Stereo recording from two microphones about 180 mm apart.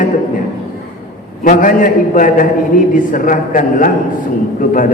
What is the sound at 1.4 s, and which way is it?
A man's voice, 50° left (ahead or behind).